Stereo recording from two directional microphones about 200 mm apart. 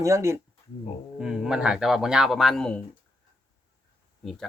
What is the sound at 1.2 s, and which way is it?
Speech, 5° right (ahead or behind).